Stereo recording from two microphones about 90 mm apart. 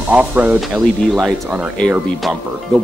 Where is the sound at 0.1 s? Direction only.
15° right (ahead or behind).